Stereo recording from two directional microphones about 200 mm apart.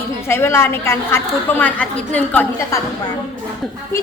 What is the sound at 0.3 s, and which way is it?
A woman's voice, 10° left (ahead or behind).